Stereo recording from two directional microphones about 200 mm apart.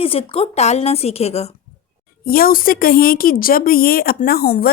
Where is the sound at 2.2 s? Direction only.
45° left (ahead or behind).